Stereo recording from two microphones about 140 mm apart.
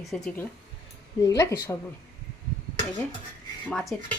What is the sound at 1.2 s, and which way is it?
Speech, 25° left (ahead or behind).